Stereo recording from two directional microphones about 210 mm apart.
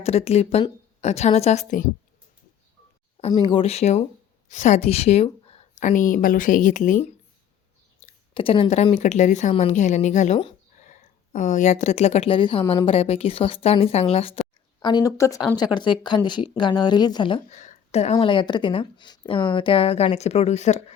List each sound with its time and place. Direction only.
0.0 s a woman's voice: 30° left (ahead or behind)
3.2 s a woman's voice: 25° left (ahead or behind)
8.0 s speech: 25° left (ahead or behind)